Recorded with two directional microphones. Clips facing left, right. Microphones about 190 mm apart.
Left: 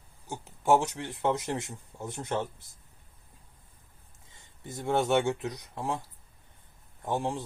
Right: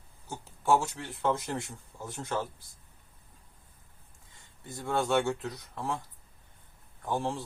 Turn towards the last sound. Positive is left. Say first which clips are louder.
# left 1 dB
turn(degrees=20)  # may be behind; listen again after turning